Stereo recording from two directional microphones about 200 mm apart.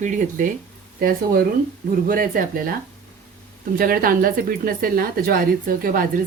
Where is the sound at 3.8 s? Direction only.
45° right (ahead or behind).